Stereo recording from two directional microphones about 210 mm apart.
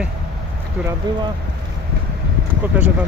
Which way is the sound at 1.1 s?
20° right (ahead or behind).